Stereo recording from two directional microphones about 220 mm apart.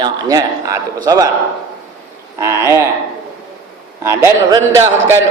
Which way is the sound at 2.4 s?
10° right (ahead or behind).